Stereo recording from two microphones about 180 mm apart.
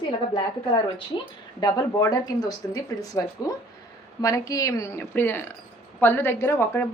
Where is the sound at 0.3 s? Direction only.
25° left (ahead or behind).